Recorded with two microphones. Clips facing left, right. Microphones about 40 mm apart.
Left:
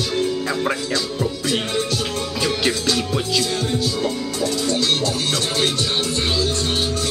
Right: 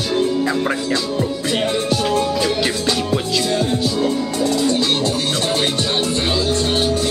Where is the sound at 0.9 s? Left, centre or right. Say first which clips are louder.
Right 3 dB; centre.